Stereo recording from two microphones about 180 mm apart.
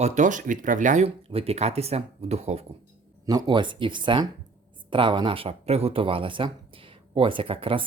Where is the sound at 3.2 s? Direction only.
25° right (ahead or behind).